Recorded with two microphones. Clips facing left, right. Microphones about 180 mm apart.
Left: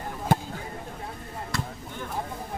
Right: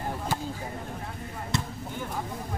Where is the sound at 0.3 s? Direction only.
55° left (ahead or behind).